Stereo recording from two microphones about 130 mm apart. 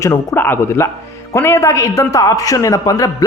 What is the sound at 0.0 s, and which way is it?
A woman's voice, 20° left (ahead or behind).